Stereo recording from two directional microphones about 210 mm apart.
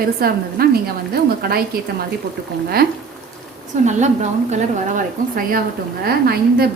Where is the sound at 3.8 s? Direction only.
35° right (ahead or behind).